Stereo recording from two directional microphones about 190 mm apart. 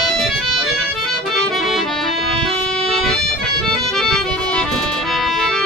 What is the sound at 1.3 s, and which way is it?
Accordion, centre (ahead or behind).